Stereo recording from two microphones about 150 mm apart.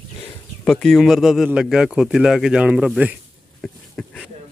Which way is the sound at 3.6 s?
5° left (ahead or behind).